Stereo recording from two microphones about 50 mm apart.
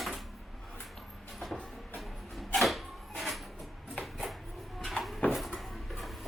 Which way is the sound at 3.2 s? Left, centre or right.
Centre.